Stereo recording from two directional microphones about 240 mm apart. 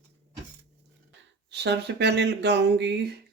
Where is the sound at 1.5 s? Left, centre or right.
Right.